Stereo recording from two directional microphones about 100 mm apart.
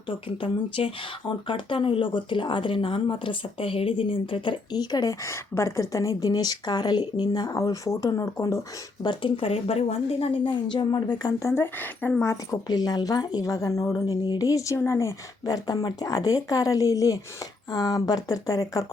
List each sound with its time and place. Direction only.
0.1 s speech: 65° left (ahead or behind)
4.7 s speech: 45° left (ahead or behind)
5.2 s speech: 30° left (ahead or behind)
9.0 s speech: 60° left (ahead or behind); by 11.3 s 45° left (ahead or behind)
11.4 s speech: 25° left (ahead or behind)
12.6 s speech: 40° left (ahead or behind)